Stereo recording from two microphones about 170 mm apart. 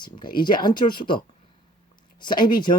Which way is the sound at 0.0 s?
25° left (ahead or behind).